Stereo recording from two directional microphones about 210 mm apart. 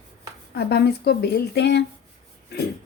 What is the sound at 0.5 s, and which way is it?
Speech, 50° left (ahead or behind).